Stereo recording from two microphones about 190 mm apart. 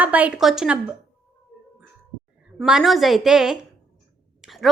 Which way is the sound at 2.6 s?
Centre (ahead or behind).